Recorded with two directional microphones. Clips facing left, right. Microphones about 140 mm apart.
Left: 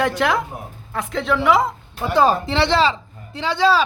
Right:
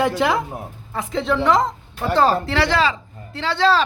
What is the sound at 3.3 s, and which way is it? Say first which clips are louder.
Speech: left 1 dB; 15° left (ahead or behind).